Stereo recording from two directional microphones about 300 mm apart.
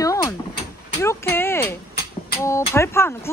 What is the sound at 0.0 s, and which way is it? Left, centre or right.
Door, centre.